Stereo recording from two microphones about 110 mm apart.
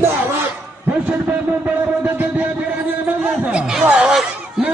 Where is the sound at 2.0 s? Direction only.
15° right (ahead or behind).